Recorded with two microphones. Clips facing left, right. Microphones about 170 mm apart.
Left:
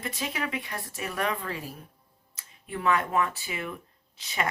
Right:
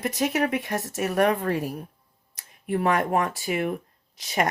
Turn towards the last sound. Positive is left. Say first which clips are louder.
# right 6 dB
turn(degrees=-40)  # may be behind; listen again after turning